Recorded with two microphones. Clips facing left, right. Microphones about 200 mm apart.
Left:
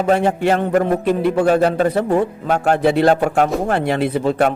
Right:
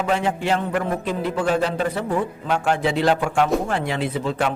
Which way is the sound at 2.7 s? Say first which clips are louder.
Left 8 dB; 60° left (ahead or behind).